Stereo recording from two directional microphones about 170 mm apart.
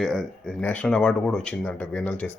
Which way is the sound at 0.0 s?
Centre (ahead or behind).